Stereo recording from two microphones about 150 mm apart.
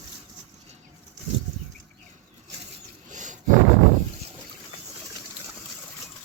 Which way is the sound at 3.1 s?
55° right (ahead or behind).